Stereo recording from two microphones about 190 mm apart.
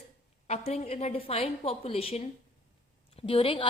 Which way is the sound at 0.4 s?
35° left (ahead or behind).